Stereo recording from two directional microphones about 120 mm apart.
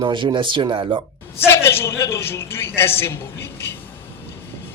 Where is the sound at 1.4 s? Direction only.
20° left (ahead or behind).